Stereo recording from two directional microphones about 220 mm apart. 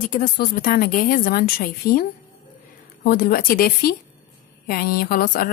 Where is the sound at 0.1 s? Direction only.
40° left (ahead or behind).